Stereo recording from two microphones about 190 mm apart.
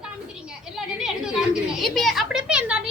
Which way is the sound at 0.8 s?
Centre (ahead or behind).